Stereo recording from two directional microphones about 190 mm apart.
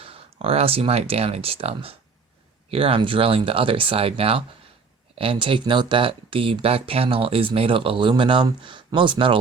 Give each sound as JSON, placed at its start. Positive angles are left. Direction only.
{"t": 0.0, "sound": "speech", "side_deg": -30}